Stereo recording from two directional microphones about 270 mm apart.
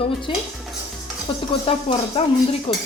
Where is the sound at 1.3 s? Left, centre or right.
Centre.